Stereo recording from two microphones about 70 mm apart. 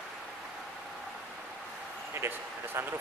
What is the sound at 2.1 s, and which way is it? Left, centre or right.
Speech, right.